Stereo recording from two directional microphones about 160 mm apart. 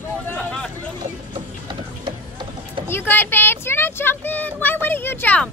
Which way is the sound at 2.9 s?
15° left (ahead or behind).